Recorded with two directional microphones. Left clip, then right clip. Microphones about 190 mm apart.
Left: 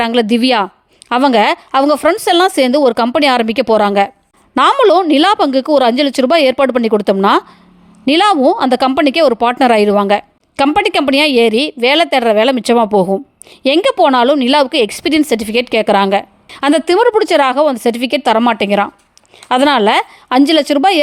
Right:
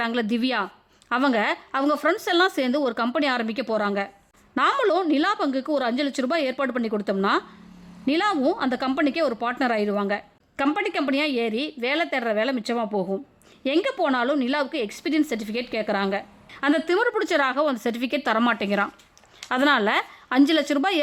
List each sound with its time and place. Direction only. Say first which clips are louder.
0.0 s a woman's voice: left 13 dB; 35° left (ahead or behind)